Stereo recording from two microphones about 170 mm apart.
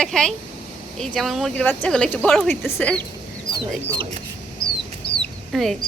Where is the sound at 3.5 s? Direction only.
25° right (ahead or behind).